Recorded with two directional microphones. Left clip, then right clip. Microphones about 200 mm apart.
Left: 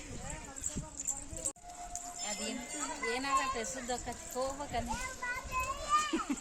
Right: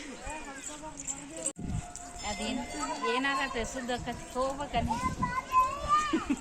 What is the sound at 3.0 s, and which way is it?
Speech, 50° left (ahead or behind).